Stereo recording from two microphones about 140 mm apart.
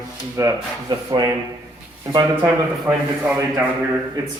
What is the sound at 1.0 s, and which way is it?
Speech, 25° right (ahead or behind).